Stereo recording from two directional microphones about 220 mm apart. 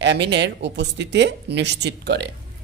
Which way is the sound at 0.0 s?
50° right (ahead or behind).